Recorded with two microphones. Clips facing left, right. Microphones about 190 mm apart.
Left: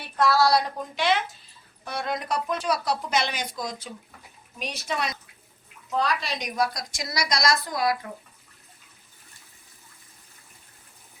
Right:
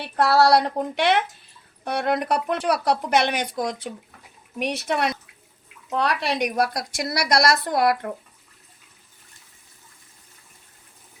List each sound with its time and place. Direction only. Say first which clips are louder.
0.0 s a woman's voice: right 3 dB; 65° right (ahead or behind)